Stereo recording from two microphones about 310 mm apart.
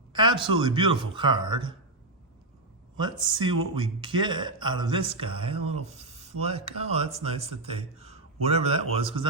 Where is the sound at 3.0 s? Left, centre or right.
Centre.